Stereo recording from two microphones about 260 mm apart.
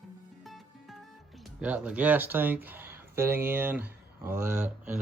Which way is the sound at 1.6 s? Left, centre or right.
Centre.